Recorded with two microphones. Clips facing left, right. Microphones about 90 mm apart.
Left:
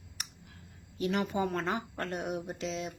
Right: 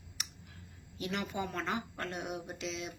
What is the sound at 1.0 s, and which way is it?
A woman's voice, 35° left (ahead or behind).